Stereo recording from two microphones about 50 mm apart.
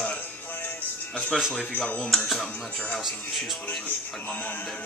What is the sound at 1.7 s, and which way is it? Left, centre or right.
Speech, left.